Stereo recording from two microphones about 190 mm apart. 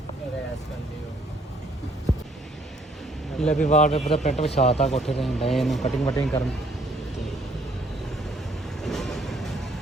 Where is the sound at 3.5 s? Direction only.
40° left (ahead or behind).